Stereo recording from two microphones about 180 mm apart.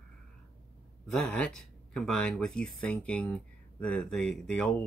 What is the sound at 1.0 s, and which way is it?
Speech, 5° left (ahead or behind).